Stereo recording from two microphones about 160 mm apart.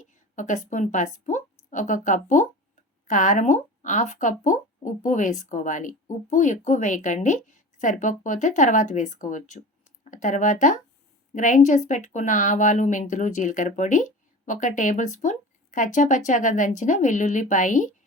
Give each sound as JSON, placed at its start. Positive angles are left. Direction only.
{"t": 0.0, "sound": "a woman's voice", "side_deg": 50}